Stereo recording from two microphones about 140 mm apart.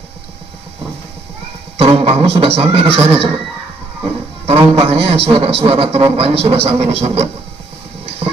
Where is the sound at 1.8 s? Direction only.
45° right (ahead or behind).